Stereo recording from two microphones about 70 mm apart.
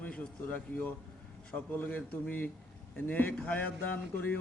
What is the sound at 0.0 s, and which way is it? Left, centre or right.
A man's voice, centre.